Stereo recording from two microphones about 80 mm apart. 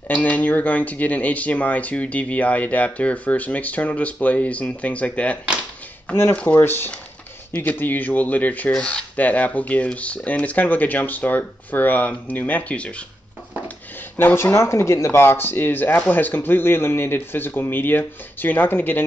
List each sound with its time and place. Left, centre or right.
0.1 s speech: left
6.6 s speech: left
14.1 s speech: left